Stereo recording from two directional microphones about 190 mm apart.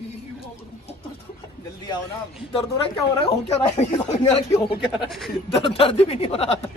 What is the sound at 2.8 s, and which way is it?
Speech, 30° left (ahead or behind).